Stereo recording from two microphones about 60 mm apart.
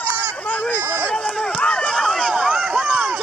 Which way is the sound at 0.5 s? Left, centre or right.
Left.